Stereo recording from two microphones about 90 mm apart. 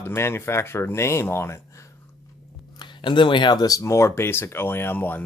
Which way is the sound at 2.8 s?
65° left (ahead or behind).